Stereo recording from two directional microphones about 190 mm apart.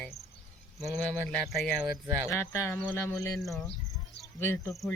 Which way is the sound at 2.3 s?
15° left (ahead or behind).